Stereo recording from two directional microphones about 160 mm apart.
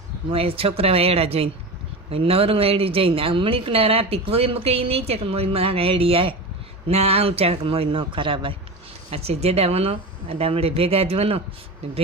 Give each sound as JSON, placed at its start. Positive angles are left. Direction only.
{"t": 0.3, "sound": "a woman's voice", "side_deg": -35}